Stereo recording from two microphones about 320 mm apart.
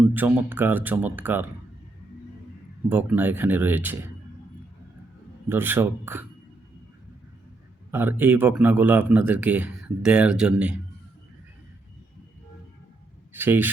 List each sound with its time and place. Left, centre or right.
0.0 s speech: centre
2.9 s speech: centre
5.5 s speech: centre
7.9 s speech: centre
13.3 s speech: centre